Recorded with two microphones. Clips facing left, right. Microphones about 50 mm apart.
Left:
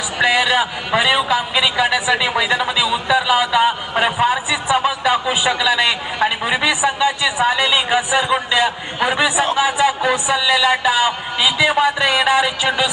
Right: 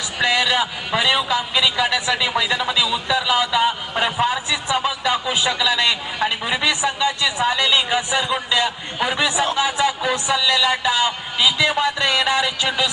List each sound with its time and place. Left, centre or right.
0.2 s a man's voice: centre